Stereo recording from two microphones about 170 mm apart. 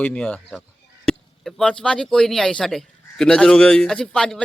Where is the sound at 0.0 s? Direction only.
5° left (ahead or behind).